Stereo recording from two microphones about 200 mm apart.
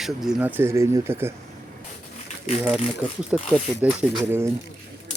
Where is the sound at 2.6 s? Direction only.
5° right (ahead or behind).